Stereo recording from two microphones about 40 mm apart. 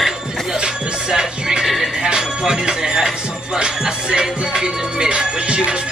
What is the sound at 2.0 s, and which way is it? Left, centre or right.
Music, centre.